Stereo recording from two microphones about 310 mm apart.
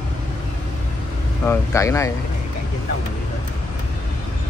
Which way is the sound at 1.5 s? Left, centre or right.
Centre.